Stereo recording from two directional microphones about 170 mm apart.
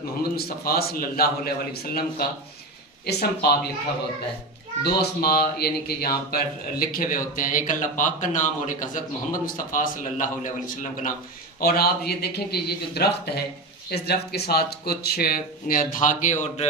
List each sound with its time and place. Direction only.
0.5 s a man's voice: 65° left (ahead or behind)
4.8 s speech: 65° left (ahead or behind); by 11.1 s 50° left (ahead or behind)
11.6 s a man's voice: 65° left (ahead or behind); by 16.6 s 45° left (ahead or behind)